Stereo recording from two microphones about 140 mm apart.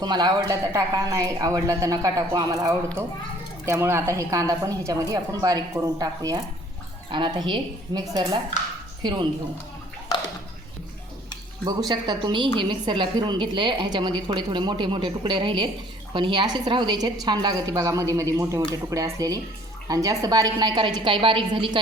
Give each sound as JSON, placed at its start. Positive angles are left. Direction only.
{"t": 0.0, "sound": "a woman's voice", "side_deg": -30}
{"t": 11.6, "sound": "a woman's voice", "side_deg": -30}